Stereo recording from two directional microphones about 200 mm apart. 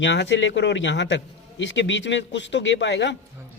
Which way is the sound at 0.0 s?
65° left (ahead or behind).